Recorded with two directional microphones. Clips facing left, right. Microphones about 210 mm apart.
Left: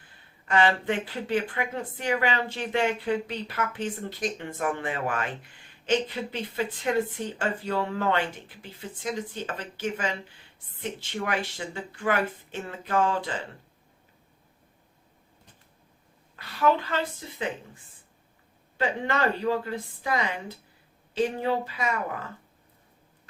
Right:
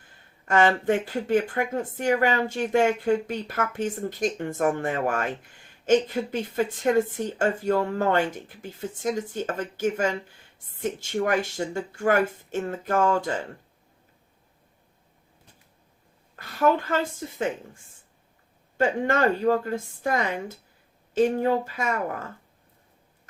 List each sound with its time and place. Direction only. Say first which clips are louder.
0.4 s speech: right 3 dB; 45° right (ahead or behind)
16.3 s a woman's voice: right 2 dB; 45° right (ahead or behind)
18.8 s speech: right 4 dB; 45° right (ahead or behind)